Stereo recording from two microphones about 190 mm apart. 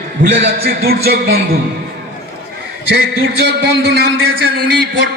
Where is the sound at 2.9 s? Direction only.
55° right (ahead or behind).